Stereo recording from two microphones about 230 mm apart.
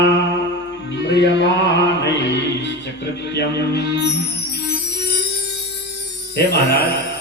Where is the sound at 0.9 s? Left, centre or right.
Left.